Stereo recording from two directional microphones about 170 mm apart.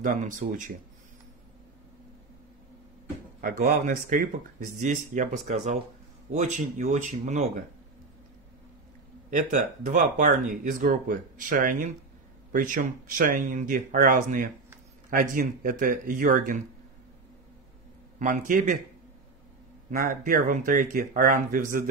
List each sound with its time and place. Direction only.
0.0 s speech: 50° right (ahead or behind)
3.3 s speech: 55° right (ahead or behind)
9.3 s speech: 50° right (ahead or behind)
18.2 s speech: 50° right (ahead or behind)
19.9 s speech: 55° right (ahead or behind)